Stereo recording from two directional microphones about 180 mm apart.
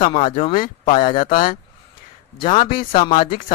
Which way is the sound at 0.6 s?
45° left (ahead or behind).